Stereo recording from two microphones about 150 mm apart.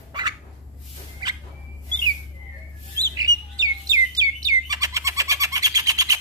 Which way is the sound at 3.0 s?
25° right (ahead or behind).